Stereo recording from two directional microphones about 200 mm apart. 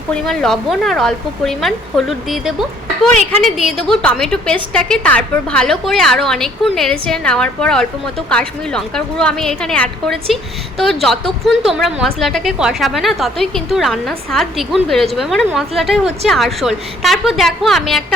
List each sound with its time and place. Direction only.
0.1 s a woman's voice: centre (ahead or behind)